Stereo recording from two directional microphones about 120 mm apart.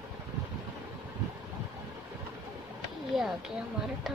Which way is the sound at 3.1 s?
5° right (ahead or behind).